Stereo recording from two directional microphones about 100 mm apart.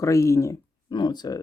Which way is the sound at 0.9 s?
45° left (ahead or behind).